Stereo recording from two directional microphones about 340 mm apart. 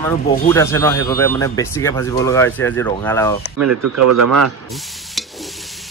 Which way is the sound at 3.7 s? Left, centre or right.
Right.